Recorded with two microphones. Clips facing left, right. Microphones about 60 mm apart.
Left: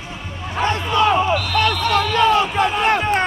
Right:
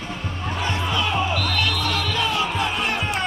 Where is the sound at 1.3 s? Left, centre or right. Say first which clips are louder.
Left 5 dB; centre.